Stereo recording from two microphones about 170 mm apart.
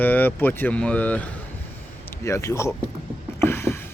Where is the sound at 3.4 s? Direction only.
15° left (ahead or behind).